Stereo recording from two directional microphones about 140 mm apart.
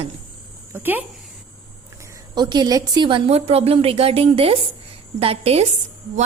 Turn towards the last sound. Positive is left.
turn(degrees=-50)  # may be behind; listen again after turning